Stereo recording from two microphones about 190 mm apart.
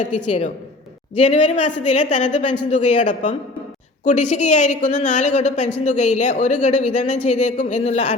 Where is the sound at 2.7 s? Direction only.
40° left (ahead or behind).